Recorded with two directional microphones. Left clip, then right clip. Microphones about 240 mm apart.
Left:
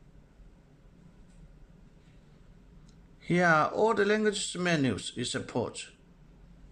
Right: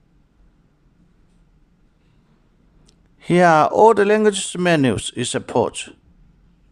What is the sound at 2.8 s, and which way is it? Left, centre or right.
Speech, right.